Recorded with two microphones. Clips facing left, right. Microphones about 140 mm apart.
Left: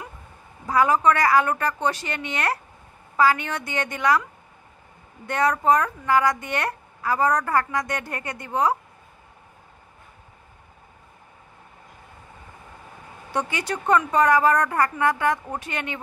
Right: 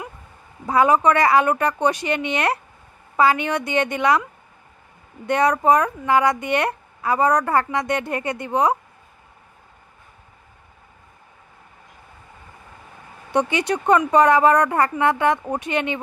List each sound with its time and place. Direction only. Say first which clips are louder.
0.7 s speech: right 3 dB; 20° right (ahead or behind)
5.2 s speech: right 4 dB; 20° right (ahead or behind)
13.3 s speech: right 6 dB; 20° right (ahead or behind)